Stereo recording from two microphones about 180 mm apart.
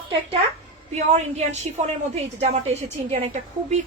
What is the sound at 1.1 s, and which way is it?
A woman's voice, 40° right (ahead or behind).